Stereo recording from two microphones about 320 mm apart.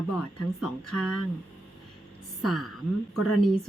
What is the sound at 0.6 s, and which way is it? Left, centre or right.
Speech, centre.